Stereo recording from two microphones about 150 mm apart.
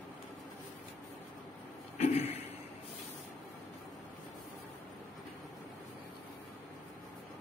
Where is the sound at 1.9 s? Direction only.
50° left (ahead or behind).